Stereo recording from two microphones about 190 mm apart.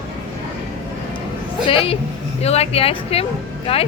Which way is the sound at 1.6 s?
30° left (ahead or behind).